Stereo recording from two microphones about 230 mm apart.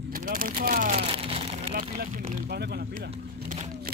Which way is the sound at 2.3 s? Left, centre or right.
Right.